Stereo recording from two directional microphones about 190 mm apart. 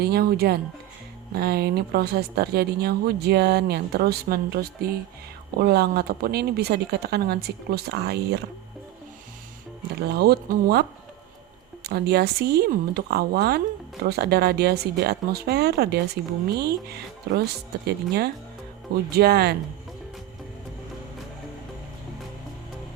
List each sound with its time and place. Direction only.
0.0 s speech: 55° right (ahead or behind)
10.1 s speech: 55° right (ahead or behind)
17.3 s speech: 55° right (ahead or behind)